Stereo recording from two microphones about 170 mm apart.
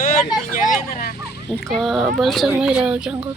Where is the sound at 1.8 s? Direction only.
Centre (ahead or behind).